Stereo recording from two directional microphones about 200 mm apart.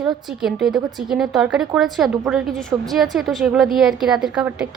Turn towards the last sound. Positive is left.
turn(degrees=-5)  # may be behind; listen again after turning